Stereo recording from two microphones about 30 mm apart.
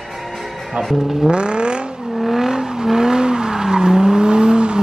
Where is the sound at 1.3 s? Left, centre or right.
Right.